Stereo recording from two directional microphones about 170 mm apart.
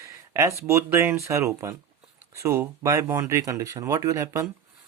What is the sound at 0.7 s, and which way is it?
Speech, 15° right (ahead or behind).